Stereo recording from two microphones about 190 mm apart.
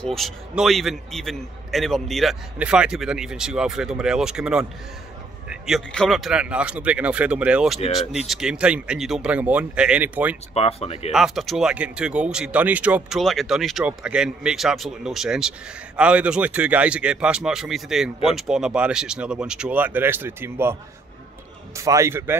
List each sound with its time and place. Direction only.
0.0 s speech: centre (ahead or behind)
10.5 s speech: 30° left (ahead or behind)
11.1 s speech: centre (ahead or behind)
21.7 s a man's voice: 15° right (ahead or behind)